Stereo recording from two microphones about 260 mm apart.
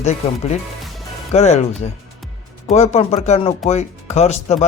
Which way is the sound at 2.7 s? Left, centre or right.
Left.